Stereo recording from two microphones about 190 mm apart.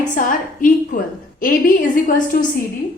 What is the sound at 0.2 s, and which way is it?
A woman's voice, 45° left (ahead or behind).